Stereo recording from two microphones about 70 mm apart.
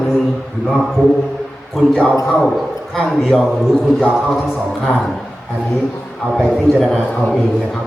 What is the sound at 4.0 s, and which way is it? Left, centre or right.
Speech, centre.